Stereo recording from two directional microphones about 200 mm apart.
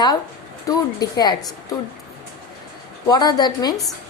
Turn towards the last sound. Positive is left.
turn(degrees=20)  # may be behind; listen again after turning